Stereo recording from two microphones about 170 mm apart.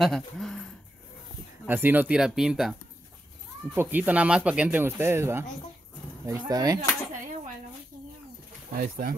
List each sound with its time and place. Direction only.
0.0 s speech: centre (ahead or behind)
1.7 s speech: 10° right (ahead or behind)
3.7 s speech: 10° right (ahead or behind)
8.7 s speech: 55° right (ahead or behind)